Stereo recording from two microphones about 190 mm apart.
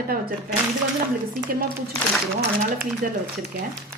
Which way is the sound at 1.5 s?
50° right (ahead or behind).